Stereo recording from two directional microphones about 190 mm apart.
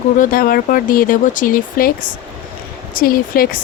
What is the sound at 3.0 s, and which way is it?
Speech, 50° left (ahead or behind).